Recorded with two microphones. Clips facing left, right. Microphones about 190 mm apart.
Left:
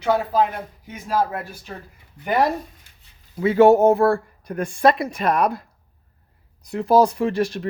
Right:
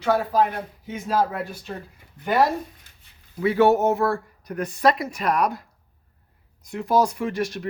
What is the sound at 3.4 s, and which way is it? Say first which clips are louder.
A woman's voice: left 5 dB; 25° left (ahead or behind).